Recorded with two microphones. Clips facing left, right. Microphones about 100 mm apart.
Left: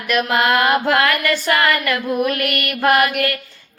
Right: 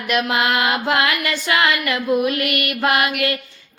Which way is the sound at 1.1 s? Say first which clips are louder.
Left 3 dB; 45° left (ahead or behind).